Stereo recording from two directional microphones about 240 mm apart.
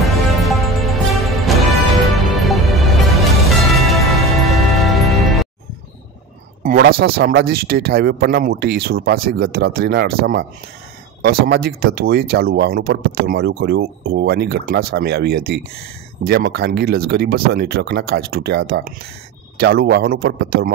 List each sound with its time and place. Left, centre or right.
0.0 s music: centre
6.6 s a sound: right
7.2 s speech: right